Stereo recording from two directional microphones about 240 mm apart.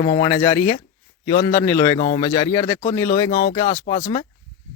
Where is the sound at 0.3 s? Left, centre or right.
Centre.